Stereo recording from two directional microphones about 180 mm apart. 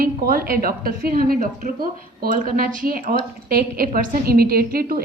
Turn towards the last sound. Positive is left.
turn(degrees=-55)  # may be behind; listen again after turning